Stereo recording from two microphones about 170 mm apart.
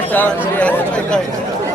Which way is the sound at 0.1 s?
10° left (ahead or behind).